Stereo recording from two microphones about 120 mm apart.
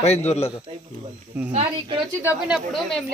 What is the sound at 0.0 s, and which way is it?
Speech, 65° left (ahead or behind).